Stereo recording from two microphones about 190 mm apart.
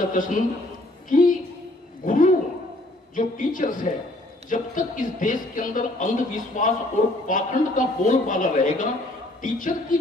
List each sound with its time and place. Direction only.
0.0 s a woman's voice: 45° left (ahead or behind)